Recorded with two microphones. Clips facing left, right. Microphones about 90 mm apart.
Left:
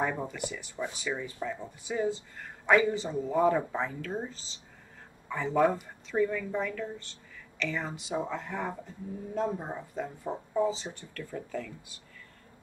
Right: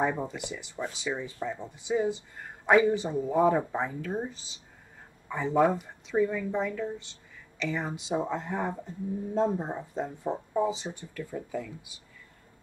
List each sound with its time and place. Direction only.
0.0 s speech: 20° right (ahead or behind)